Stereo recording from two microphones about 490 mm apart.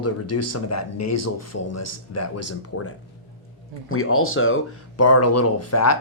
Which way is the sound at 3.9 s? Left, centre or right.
Left.